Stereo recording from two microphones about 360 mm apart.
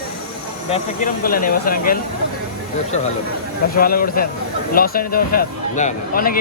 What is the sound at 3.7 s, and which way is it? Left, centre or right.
Speech, left.